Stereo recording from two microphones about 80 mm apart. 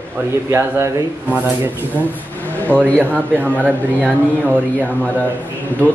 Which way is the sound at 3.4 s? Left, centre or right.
Right.